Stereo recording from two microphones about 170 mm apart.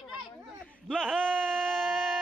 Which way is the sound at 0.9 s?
5° left (ahead or behind).